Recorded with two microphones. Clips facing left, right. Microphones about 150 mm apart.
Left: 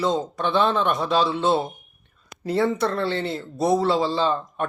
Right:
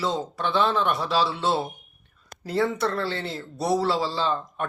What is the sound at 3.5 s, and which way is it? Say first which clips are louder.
Speech: left 3 dB; 20° left (ahead or behind).